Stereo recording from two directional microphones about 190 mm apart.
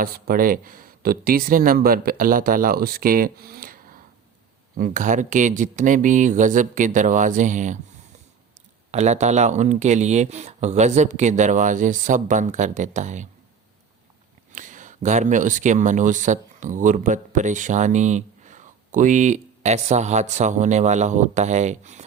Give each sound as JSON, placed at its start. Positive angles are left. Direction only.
{"t": 0.0, "sound": "speech", "side_deg": -50}
{"t": 8.9, "sound": "speech", "side_deg": -35}
{"t": 14.5, "sound": "speech", "side_deg": -40}